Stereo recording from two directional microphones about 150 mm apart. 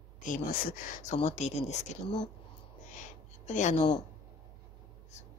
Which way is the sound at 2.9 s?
55° left (ahead or behind).